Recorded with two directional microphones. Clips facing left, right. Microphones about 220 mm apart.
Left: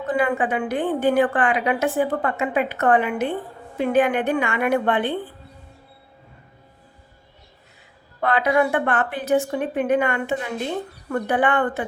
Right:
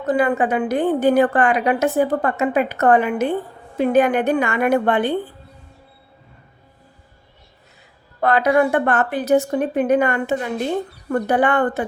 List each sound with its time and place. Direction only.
0.0 s a woman's voice: 40° right (ahead or behind)
8.2 s a woman's voice: 40° right (ahead or behind)